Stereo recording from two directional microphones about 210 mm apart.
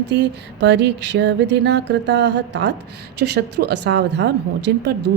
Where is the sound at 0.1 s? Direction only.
55° right (ahead or behind).